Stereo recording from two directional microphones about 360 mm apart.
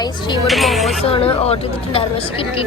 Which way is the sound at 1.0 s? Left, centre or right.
Centre.